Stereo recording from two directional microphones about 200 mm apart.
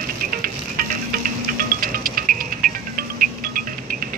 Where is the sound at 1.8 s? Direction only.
45° right (ahead or behind).